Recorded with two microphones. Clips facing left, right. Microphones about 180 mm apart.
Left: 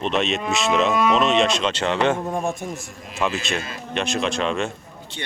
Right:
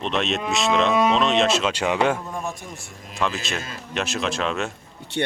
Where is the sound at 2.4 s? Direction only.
50° left (ahead or behind).